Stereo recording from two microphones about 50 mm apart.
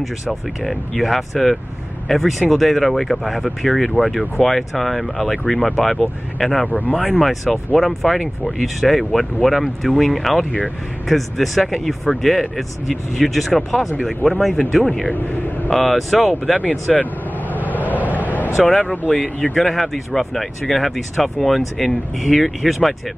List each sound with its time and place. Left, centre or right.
0.0 s speech: centre
6.7 s speech: left
7.2 s speech: centre
15.1 s speech: left
15.7 s speech: centre
16.9 s vehicle: left
17.9 s vehicle: right
18.7 s speech: centre
19.5 s speech: centre